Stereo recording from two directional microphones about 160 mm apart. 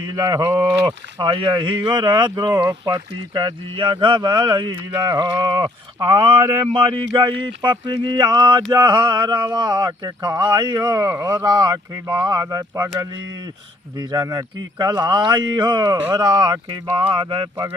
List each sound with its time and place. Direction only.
0.0 s speech: 25° right (ahead or behind)
13.9 s speech: 25° right (ahead or behind)